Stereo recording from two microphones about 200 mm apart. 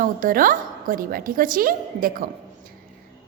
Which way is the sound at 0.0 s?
45° right (ahead or behind).